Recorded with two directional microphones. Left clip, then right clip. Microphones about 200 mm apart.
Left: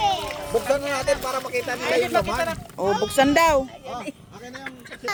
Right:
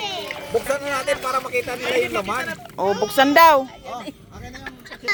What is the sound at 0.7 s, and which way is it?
Speech, 25° right (ahead or behind).